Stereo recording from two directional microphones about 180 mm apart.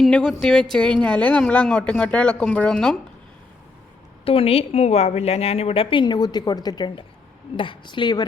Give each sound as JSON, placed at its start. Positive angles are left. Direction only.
{"t": 0.0, "sound": "speech", "side_deg": 5}
{"t": 4.3, "sound": "a woman's voice", "side_deg": 30}